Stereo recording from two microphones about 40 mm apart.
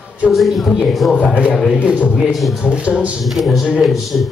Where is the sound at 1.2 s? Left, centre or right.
Right.